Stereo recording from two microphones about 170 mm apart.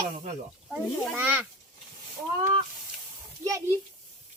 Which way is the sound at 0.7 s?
10° right (ahead or behind).